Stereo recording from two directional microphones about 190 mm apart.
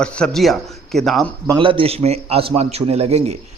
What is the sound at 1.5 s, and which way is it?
A man's voice, 25° right (ahead or behind).